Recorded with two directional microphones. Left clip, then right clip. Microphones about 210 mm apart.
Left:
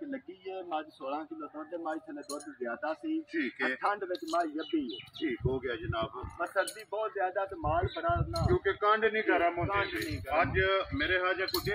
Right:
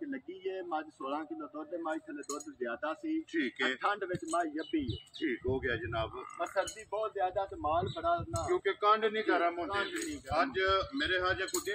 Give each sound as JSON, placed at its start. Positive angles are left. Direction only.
{"t": 0.1, "sound": "a sound", "side_deg": 50}
{"t": 2.6, "sound": "cutlery", "side_deg": 40}
{"t": 3.3, "sound": "speech", "side_deg": 40}